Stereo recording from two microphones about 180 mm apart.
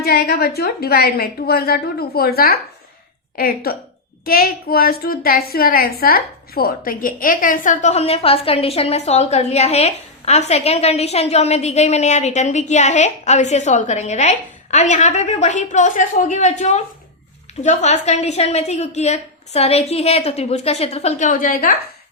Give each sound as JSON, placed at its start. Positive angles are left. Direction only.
{"t": 0.0, "sound": "a woman's voice", "side_deg": 60}